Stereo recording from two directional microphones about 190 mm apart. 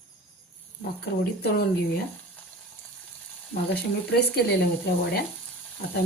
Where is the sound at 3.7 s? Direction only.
60° left (ahead or behind).